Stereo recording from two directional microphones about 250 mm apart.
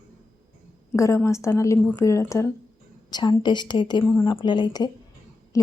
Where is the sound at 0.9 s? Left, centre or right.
Centre.